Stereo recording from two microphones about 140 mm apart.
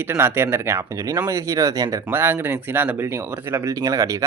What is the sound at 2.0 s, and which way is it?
Speech, 15° right (ahead or behind).